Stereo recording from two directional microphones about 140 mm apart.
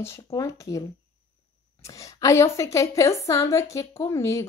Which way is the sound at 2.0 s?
20° left (ahead or behind).